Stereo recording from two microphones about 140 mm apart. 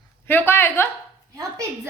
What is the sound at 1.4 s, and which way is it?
Speech, 25° right (ahead or behind).